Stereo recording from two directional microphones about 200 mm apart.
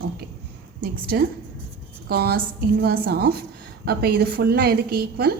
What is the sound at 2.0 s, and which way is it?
A woman's voice, 50° right (ahead or behind).